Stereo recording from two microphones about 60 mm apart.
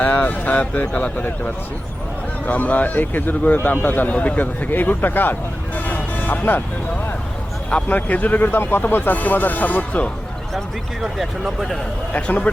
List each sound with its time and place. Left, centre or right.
0.0 s speech: left
2.5 s speech: left
7.7 s speech: left
11.0 s speech: centre